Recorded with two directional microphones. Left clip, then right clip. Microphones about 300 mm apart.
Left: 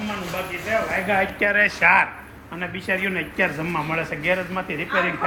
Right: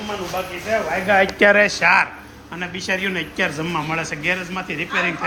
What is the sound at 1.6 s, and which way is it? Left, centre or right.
A man's voice, centre.